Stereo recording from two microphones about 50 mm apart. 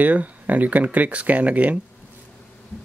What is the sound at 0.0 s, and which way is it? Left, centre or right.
Speech, right.